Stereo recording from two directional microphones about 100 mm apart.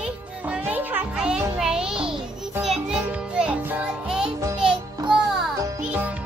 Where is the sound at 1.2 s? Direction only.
5° right (ahead or behind).